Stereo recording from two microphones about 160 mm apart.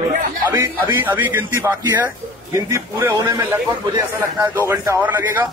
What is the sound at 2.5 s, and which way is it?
A man's voice, 20° right (ahead or behind).